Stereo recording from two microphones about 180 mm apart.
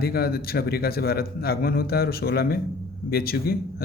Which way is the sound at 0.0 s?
60° left (ahead or behind).